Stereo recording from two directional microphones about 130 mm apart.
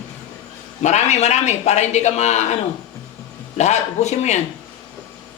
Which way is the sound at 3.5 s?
60° left (ahead or behind).